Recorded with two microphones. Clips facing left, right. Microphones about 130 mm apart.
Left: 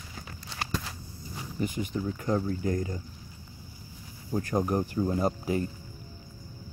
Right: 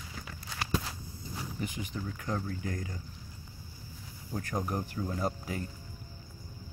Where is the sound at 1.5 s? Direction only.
45° left (ahead or behind).